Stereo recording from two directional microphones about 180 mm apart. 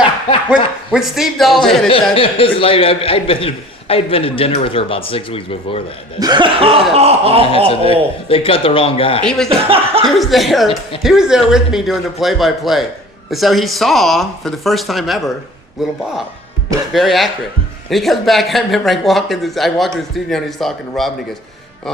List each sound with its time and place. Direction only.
0.5 s speech: 5° right (ahead or behind)
1.9 s a man's voice: 30° left (ahead or behind)
6.1 s a sound: 25° right (ahead or behind)
7.7 s a man's voice: 30° left (ahead or behind)
9.6 s a sound: 30° right (ahead or behind)
10.2 s speech: centre (ahead or behind)
16.9 s speech: centre (ahead or behind)